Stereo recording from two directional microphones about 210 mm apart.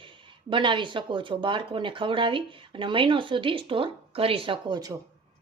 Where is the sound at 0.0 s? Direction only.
25° right (ahead or behind).